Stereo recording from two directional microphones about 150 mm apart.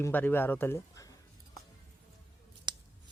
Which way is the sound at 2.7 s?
30° right (ahead or behind).